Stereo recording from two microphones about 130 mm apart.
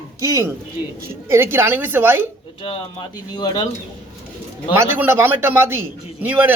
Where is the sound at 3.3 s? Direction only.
35° left (ahead or behind).